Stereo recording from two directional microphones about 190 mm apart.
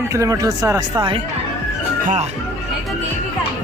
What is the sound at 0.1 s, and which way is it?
Speech, 15° right (ahead or behind).